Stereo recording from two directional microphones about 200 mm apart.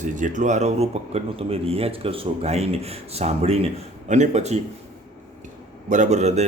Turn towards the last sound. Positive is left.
turn(degrees=-35)  # may be behind; listen again after turning